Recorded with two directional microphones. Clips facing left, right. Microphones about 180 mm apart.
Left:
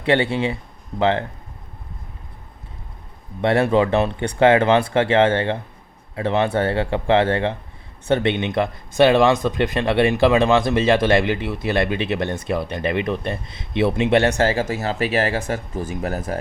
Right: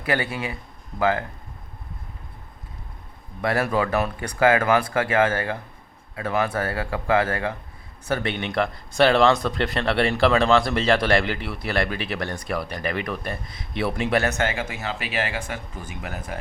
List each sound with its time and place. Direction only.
0.0 s speech: 25° left (ahead or behind)
3.4 s speech: 25° left (ahead or behind)